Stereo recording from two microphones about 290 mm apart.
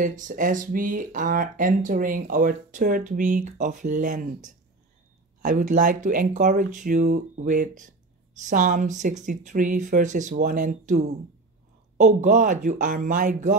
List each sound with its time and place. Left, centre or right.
0.0 s speech: right